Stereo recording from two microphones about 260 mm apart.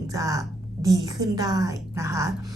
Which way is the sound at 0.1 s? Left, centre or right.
Centre.